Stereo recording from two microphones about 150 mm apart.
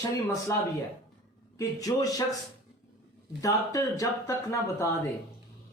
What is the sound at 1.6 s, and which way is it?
Speech, 25° left (ahead or behind).